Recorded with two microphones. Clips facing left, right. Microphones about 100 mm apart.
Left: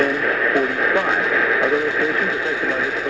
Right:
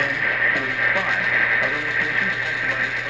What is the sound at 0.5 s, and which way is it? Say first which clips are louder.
Radio: left 6 dB; 35° left (ahead or behind).